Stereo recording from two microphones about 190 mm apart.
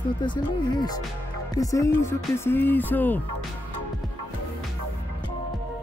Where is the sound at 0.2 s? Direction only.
25° left (ahead or behind).